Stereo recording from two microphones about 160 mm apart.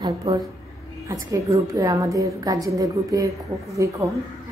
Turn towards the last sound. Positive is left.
turn(degrees=-20)  # may be behind; listen again after turning